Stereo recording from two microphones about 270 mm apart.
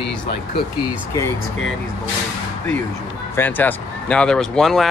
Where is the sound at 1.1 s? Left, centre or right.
Centre.